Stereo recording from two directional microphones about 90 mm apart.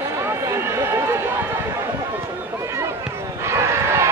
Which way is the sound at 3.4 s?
30° right (ahead or behind).